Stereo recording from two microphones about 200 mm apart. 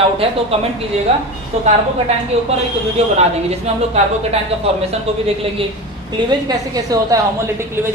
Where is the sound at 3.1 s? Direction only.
30° right (ahead or behind).